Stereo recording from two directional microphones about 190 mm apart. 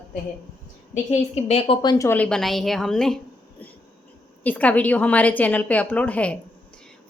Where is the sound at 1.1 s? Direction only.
35° left (ahead or behind).